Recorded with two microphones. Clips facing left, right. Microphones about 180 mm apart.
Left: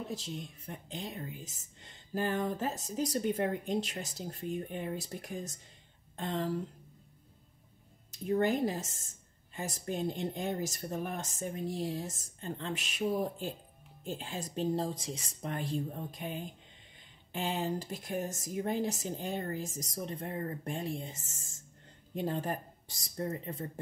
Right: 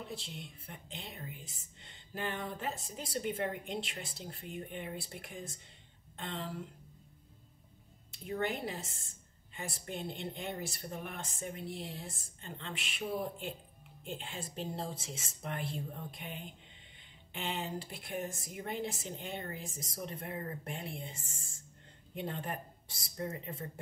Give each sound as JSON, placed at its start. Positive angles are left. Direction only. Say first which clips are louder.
{"t": 0.1, "sound": "speech", "louder": "left 5 dB", "side_deg": 40}
{"t": 8.1, "sound": "speech", "louder": "left 7 dB", "side_deg": 40}